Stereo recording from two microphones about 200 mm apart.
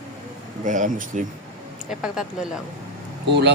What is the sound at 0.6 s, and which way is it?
Speech, 40° right (ahead or behind).